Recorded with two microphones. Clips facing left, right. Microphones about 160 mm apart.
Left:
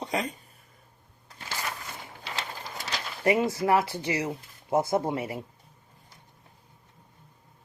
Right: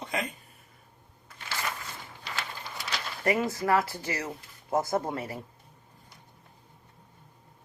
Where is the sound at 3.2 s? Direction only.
20° left (ahead or behind).